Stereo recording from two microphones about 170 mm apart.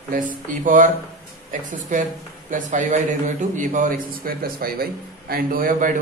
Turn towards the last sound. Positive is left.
turn(degrees=-50)  # may be behind; listen again after turning